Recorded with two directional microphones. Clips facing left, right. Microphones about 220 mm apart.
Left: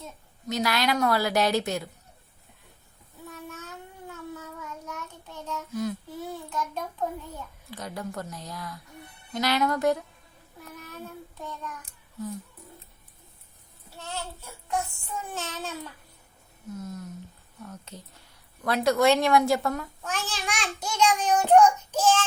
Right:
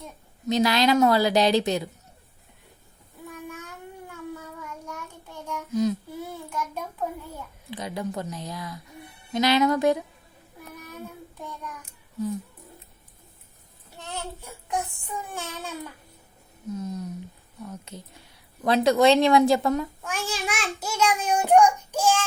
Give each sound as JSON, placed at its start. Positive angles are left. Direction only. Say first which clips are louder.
{"t": 0.6, "sound": "a woman's voice", "louder": "right 5 dB", "side_deg": -20}
{"t": 3.2, "sound": "child singing", "louder": "right 3 dB", "side_deg": -10}
{"t": 4.9, "sound": "child singing", "louder": "right 1 dB", "side_deg": -10}
{"t": 6.5, "sound": "child singing", "louder": "even", "side_deg": -10}
{"t": 7.7, "sound": "a child's voice", "louder": "right 5 dB", "side_deg": -15}
{"t": 14.0, "sound": "child singing", "louder": "right 1 dB", "side_deg": -15}
{"t": 16.7, "sound": "a child's voice", "louder": "right 5 dB", "side_deg": -15}
{"t": 18.6, "sound": "a child's voice", "louder": "right 3 dB", "side_deg": -20}